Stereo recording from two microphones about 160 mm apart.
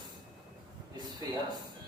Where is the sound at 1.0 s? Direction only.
25° right (ahead or behind).